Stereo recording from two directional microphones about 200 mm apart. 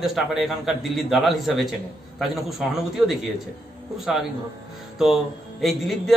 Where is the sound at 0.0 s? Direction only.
Centre (ahead or behind).